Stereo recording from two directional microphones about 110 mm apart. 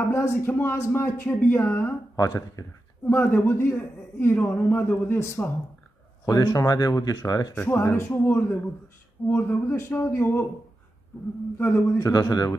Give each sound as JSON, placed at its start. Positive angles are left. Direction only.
{"t": 0.0, "sound": "speech", "side_deg": 25}
{"t": 2.1, "sound": "speech", "side_deg": 35}
{"t": 3.1, "sound": "speech", "side_deg": 20}
{"t": 6.4, "sound": "speech", "side_deg": 30}
{"t": 7.6, "sound": "speech", "side_deg": 20}
{"t": 11.5, "sound": "speech", "side_deg": 25}
{"t": 12.1, "sound": "speech", "side_deg": 35}